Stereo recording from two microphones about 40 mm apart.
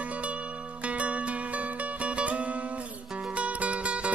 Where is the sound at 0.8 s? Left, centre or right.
Right.